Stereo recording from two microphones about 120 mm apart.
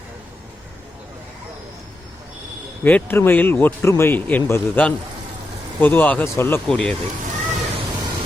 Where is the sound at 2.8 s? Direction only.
15° left (ahead or behind).